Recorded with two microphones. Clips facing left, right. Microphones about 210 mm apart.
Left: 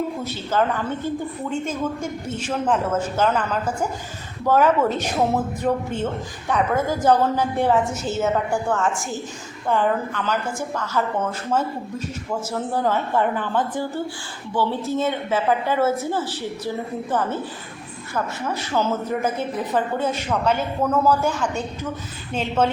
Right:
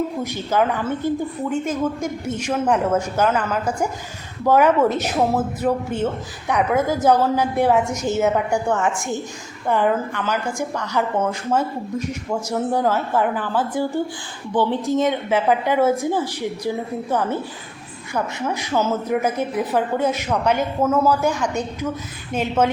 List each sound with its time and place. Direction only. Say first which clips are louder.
0.2 s a woman's voice: right 2 dB; 15° right (ahead or behind)